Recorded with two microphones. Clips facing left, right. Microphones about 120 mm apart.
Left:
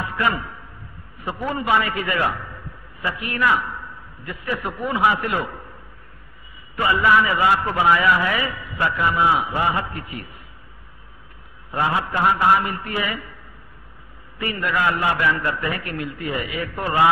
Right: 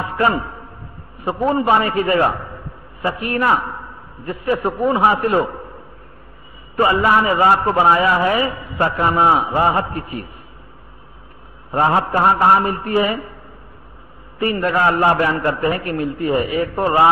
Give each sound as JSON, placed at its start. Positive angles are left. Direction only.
{"t": 0.0, "sound": "a sound", "side_deg": -30}
{"t": 1.2, "sound": "a man's voice", "side_deg": -30}
{"t": 6.8, "sound": "a man's voice", "side_deg": -35}
{"t": 11.8, "sound": "a man's voice", "side_deg": -40}
{"t": 14.4, "sound": "a man's voice", "side_deg": -35}